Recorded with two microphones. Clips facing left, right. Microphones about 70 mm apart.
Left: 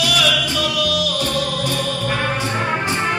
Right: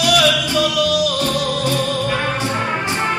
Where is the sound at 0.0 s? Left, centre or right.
Right.